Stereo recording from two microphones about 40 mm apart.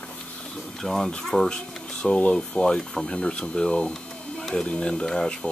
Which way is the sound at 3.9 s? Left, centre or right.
Centre.